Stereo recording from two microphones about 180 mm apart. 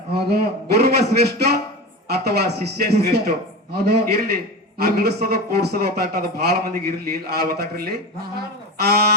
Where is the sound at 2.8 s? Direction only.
65° right (ahead or behind).